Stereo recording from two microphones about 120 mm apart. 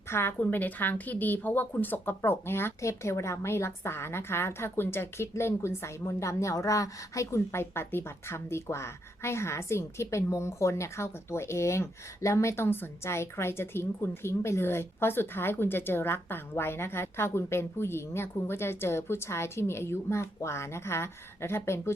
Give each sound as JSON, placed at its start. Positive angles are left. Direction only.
{"t": 0.1, "sound": "a woman's voice", "side_deg": 20}